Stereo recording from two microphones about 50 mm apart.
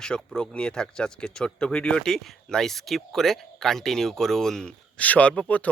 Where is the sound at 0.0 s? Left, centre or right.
Centre.